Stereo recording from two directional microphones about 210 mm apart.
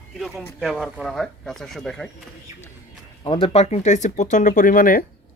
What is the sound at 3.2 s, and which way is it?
Speech, 25° left (ahead or behind).